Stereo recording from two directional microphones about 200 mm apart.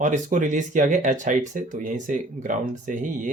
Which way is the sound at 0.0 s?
40° right (ahead or behind).